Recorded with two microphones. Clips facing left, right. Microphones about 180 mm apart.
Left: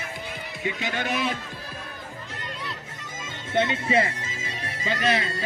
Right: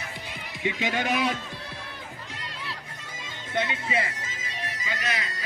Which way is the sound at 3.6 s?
25° left (ahead or behind).